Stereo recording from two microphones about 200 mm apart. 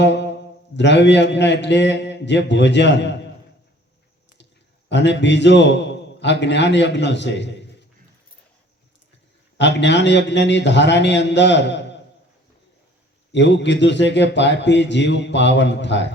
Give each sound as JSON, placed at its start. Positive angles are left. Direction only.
{"t": 0.0, "sound": "a man's voice", "side_deg": 60}
{"t": 4.9, "sound": "a man's voice", "side_deg": 60}
{"t": 9.6, "sound": "a man's voice", "side_deg": 60}
{"t": 13.3, "sound": "a man's voice", "side_deg": 60}